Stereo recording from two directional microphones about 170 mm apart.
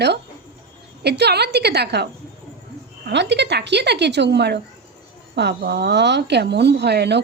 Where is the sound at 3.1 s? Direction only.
90° right.